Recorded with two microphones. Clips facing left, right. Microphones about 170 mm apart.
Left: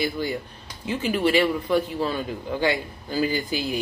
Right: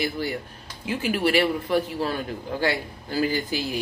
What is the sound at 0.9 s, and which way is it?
Speech, 5° right (ahead or behind).